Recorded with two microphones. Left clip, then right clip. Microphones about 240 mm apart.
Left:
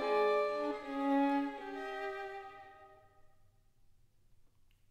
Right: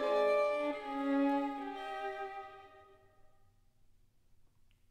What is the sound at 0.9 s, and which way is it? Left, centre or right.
Music, left.